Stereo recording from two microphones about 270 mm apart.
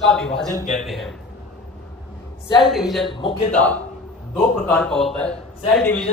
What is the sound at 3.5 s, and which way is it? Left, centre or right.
A man's voice, centre.